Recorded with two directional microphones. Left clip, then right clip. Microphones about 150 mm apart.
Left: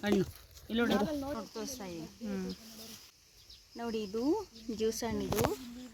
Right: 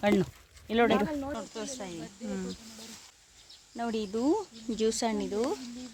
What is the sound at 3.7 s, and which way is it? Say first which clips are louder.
Speech: right 4 dB; 60° right (ahead or behind).